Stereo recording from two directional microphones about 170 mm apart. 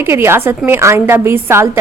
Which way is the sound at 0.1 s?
15° right (ahead or behind).